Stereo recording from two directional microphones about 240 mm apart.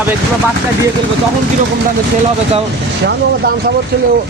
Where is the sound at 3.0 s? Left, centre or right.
Right.